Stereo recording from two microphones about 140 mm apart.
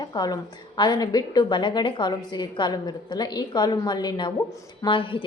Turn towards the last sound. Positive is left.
turn(degrees=35)  # may be behind; listen again after turning